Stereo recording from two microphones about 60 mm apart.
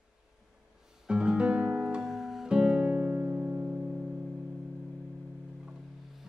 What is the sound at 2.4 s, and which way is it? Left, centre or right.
Music, centre.